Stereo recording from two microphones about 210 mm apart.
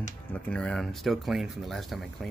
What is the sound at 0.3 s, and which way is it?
Speech, 5° left (ahead or behind).